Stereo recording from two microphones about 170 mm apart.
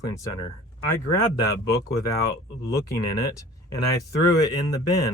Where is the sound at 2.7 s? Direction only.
20° left (ahead or behind).